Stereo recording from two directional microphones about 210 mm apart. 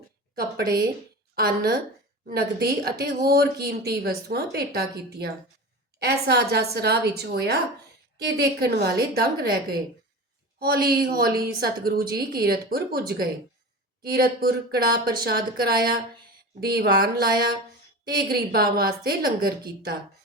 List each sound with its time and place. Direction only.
0.3 s a woman's voice: 45° right (ahead or behind)